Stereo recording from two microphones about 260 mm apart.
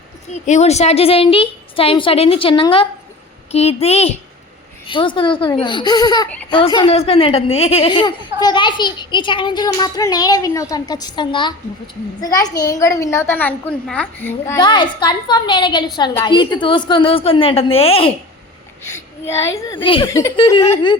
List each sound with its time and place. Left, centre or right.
0.4 s a woman's voice: left
18.8 s speech: centre